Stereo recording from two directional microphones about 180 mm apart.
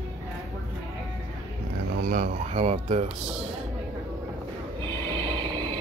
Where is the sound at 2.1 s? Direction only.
45° right (ahead or behind).